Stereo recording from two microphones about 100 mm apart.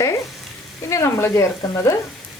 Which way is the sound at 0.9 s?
30° left (ahead or behind).